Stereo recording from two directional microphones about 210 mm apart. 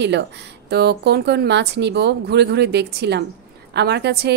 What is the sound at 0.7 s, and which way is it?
A woman's voice, 50° right (ahead or behind).